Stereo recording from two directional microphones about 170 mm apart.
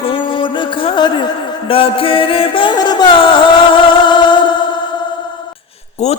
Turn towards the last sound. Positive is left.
turn(degrees=40)  # may be behind; listen again after turning